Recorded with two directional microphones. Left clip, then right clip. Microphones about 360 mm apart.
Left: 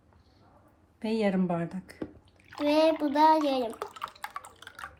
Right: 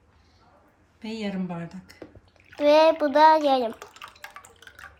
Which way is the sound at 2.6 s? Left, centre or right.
Centre.